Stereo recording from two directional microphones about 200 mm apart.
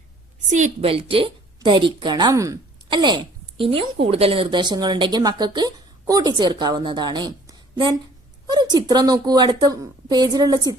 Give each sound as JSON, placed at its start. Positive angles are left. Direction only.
{"t": 0.5, "sound": "a woman's voice", "side_deg": -35}